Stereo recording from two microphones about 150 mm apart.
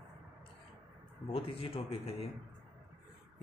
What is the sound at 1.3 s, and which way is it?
Speech, 40° left (ahead or behind).